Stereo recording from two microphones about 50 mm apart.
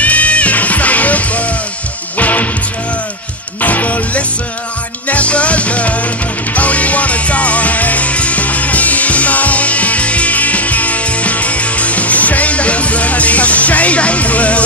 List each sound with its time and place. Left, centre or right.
0.0 s music: left
3.6 s music: left